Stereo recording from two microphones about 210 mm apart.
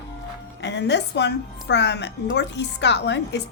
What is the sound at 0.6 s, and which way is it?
A woman's voice, 55° left (ahead or behind).